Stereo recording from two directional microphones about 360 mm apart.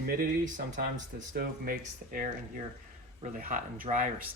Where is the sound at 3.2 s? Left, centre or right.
Right.